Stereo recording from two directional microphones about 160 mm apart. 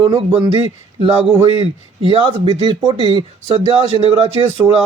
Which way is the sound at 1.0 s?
35° right (ahead or behind).